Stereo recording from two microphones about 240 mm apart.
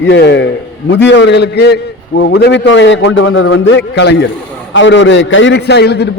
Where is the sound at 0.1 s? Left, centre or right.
Left.